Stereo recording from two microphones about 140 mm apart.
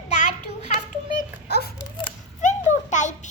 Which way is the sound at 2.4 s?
60° left (ahead or behind).